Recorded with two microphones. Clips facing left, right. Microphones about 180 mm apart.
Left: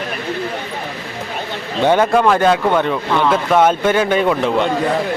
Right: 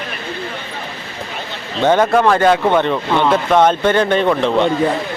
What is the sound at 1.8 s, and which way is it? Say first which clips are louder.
Speech: right 1 dB; 10° left (ahead or behind).